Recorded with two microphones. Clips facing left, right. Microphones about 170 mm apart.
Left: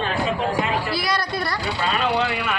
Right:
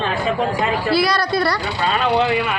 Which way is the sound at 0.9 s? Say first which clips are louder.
Right 7 dB; 80° right.